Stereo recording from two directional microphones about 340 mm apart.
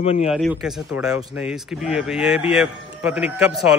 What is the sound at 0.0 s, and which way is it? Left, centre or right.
Speech, centre.